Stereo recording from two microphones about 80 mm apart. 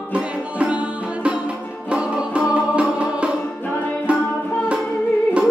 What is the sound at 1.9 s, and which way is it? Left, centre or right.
Music, centre.